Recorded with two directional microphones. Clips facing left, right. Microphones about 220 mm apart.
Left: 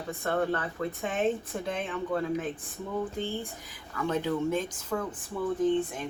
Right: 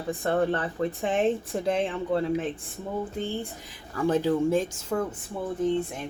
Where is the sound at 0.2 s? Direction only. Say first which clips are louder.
Right 3 dB; 30° right (ahead or behind).